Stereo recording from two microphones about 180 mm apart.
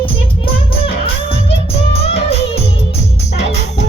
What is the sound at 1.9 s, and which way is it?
Music of bollywood, 35° left (ahead or behind).